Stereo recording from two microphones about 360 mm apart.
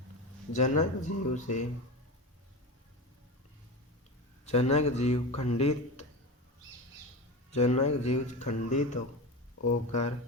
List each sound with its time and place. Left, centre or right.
0.5 s speech: centre
4.4 s speech: centre
7.5 s speech: centre